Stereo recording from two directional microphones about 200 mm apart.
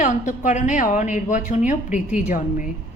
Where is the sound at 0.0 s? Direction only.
40° left (ahead or behind).